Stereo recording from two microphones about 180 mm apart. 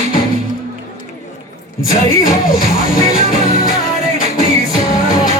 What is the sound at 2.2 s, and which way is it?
Speech, 50° left (ahead or behind).